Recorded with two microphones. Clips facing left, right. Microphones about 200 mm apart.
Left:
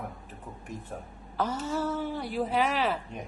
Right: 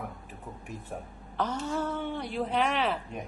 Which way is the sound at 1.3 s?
5° left (ahead or behind).